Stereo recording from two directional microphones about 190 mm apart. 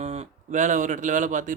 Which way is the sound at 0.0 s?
35° right (ahead or behind).